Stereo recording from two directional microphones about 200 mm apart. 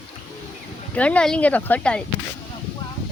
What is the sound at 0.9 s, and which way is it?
Speech, 5° left (ahead or behind).